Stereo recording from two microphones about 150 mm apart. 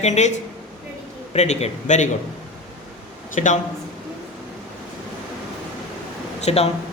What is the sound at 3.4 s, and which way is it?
Speech, 50° left (ahead or behind).